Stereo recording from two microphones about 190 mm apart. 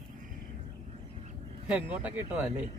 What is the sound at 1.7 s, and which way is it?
Speech, 5° right (ahead or behind).